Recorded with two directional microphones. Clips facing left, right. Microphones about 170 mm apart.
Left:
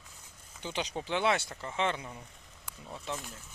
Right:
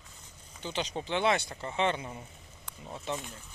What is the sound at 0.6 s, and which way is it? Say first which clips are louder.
Speech: right 1 dB; 10° left (ahead or behind).